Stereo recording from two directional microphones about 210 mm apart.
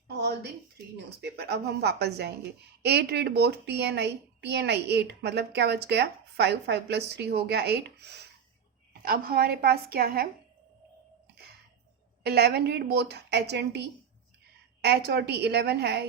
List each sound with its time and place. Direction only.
0.9 s a woman's voice: 55° right (ahead or behind)
12.2 s a woman's voice: 50° right (ahead or behind)